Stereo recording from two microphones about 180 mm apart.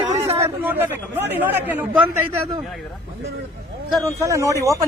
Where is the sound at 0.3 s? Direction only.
10° right (ahead or behind).